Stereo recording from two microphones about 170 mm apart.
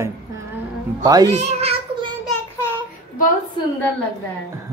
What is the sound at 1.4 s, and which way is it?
Speech, 35° right (ahead or behind).